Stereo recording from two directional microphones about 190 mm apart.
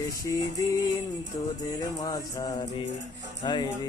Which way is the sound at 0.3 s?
20° left (ahead or behind).